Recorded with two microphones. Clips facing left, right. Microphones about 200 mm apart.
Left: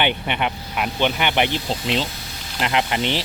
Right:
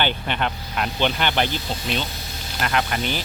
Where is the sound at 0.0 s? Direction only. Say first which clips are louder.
Left 2 dB; 15° left (ahead or behind).